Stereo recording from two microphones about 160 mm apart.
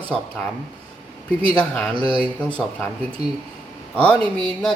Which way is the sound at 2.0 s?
35° right (ahead or behind).